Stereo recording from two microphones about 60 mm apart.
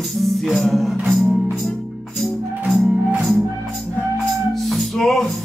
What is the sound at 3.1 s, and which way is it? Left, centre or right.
Music, centre.